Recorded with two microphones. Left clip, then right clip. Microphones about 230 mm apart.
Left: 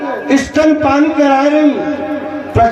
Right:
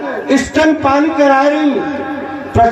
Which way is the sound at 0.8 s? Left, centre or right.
Left.